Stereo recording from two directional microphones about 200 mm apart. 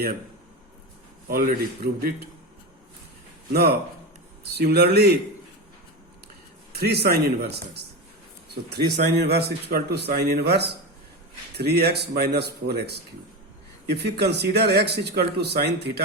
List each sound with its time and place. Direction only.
1.3 s speech: 50° right (ahead or behind)
3.5 s speech: 50° right (ahead or behind)
6.7 s speech: 55° right (ahead or behind)